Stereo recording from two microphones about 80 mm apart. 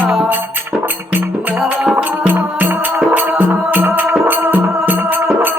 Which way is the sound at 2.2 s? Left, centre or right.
Right.